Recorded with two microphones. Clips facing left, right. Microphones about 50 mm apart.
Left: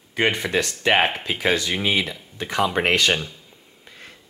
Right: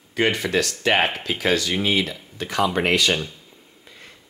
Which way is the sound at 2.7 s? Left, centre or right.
Left.